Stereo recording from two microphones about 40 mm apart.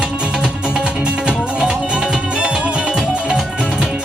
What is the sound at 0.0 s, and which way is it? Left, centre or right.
Music, right.